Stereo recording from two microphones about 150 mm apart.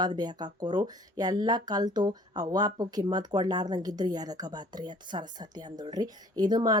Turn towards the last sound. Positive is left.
turn(degrees=-25)  # may be behind; listen again after turning